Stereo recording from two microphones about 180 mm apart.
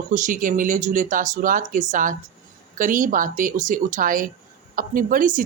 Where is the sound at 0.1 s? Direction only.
45° right (ahead or behind).